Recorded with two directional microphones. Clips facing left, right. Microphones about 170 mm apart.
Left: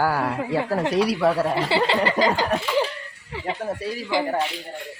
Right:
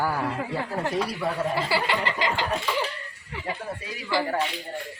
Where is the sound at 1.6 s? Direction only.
25° left (ahead or behind).